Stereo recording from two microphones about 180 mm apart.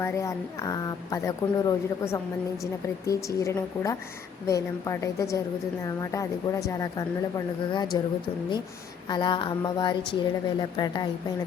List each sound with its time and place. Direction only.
0.0 s a woman's voice: 15° left (ahead or behind)
9.0 s a woman's voice: 25° left (ahead or behind)